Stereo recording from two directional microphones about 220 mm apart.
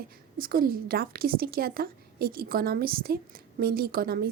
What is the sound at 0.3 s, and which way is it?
A woman's voice, 40° right (ahead or behind).